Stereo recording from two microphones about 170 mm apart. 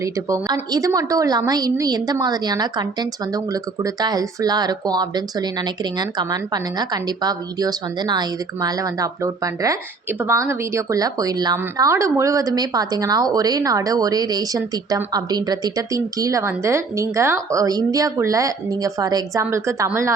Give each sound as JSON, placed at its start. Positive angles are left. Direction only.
{"t": 0.0, "sound": "a woman's voice", "side_deg": -20}